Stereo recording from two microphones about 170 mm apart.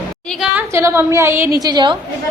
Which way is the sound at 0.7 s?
15° right (ahead or behind).